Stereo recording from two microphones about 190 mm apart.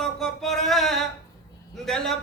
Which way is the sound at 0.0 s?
Centre (ahead or behind).